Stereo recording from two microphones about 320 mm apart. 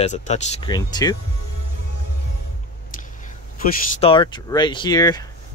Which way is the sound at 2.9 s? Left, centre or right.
Left.